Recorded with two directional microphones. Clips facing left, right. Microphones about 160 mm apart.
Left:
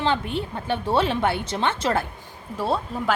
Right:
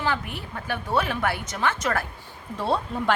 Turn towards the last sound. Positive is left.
turn(degrees=5)  # may be behind; listen again after turning